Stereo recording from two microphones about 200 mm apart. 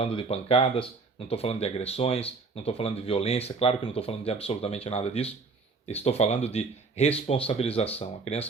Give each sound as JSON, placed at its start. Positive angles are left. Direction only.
{"t": 0.0, "sound": "speech", "side_deg": 30}